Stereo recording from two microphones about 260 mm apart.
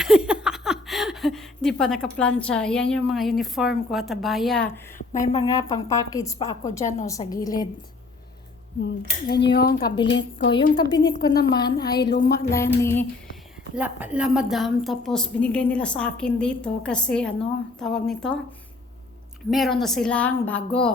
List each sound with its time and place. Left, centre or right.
0.0 s speech: centre
4.9 s a sound: left
5.4 s a woman's voice: centre
8.8 s speech: left
9.8 s a woman's voice: centre
10.1 s a woman's voice: left
11.2 s a woman's voice: centre
12.1 s speech: left
12.5 s a woman's voice: centre
13.7 s a woman's voice: centre
19.5 s a woman's voice: centre